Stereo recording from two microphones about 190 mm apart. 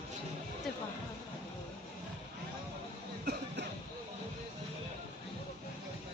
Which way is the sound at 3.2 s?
60° right (ahead or behind).